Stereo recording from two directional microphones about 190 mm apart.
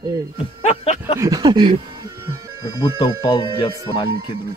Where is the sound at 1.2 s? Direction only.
20° right (ahead or behind).